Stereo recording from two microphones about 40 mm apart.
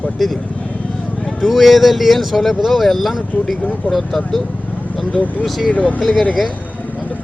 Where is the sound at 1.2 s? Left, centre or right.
Centre.